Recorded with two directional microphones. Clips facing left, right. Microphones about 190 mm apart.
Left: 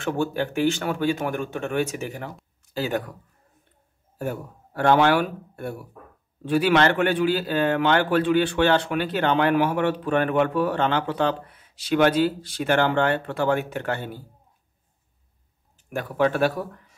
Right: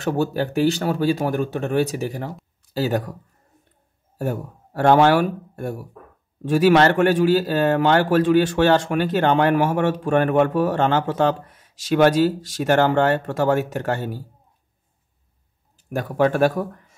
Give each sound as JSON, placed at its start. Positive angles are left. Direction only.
{"t": 0.0, "sound": "speech", "side_deg": -40}
{"t": 4.2, "sound": "a man's voice", "side_deg": -40}
{"t": 15.9, "sound": "a man's voice", "side_deg": -45}